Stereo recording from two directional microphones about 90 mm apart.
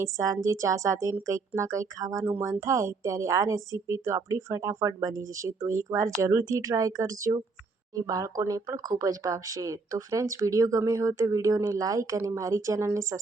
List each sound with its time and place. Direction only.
0.0 s speech: 35° right (ahead or behind)